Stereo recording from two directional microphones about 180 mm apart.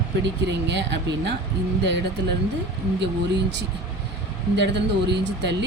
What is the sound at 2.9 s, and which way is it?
A woman's voice, 75° right (ahead or behind).